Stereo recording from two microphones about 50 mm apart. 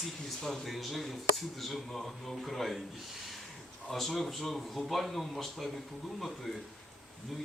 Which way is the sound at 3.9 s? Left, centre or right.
Centre.